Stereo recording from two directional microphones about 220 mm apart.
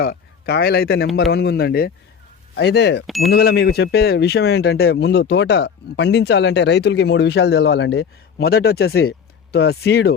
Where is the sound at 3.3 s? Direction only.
45° left (ahead or behind).